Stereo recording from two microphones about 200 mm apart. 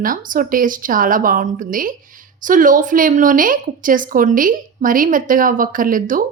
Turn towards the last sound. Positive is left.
turn(degrees=-45)  # may be behind; listen again after turning